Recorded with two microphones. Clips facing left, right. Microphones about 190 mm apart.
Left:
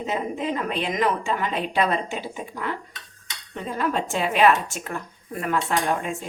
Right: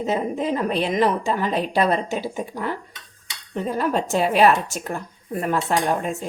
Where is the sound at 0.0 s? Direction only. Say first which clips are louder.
Right 4 dB; 40° right (ahead or behind).